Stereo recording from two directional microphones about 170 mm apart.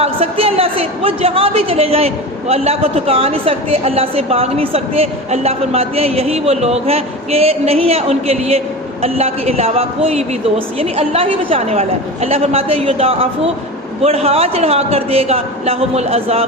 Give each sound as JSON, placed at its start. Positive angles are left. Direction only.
{"t": 0.0, "sound": "a woman's voice", "side_deg": -35}